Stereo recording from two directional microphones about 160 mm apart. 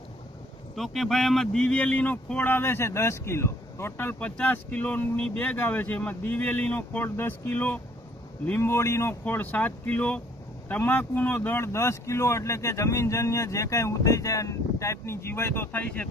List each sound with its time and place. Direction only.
0.8 s a man's voice: centre (ahead or behind)